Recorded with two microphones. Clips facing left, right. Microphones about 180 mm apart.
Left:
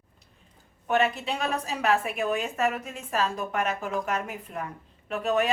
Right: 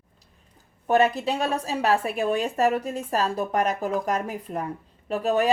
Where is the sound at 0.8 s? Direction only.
35° right (ahead or behind).